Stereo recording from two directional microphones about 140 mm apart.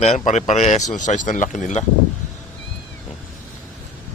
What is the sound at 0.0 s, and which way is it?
Speech, 55° left (ahead or behind).